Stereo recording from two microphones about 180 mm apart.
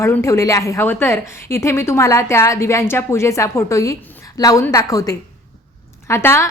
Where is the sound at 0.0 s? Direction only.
15° left (ahead or behind).